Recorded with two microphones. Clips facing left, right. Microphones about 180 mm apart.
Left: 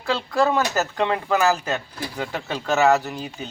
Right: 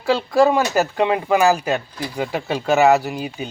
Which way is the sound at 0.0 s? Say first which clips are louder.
Right 6 dB; 10° right (ahead or behind).